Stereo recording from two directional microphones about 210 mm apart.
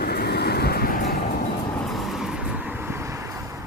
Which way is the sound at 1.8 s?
Centre (ahead or behind).